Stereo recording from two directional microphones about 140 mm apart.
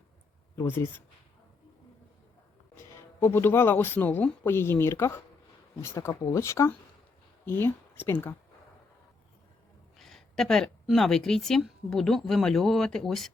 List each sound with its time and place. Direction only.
0.5 s speech: 15° left (ahead or behind)
2.7 s a woman's voice: 15° left (ahead or behind)
10.0 s a woman's voice: centre (ahead or behind)